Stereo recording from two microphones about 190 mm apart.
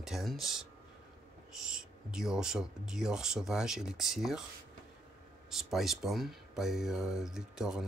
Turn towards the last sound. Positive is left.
turn(degrees=-5)  # may be behind; listen again after turning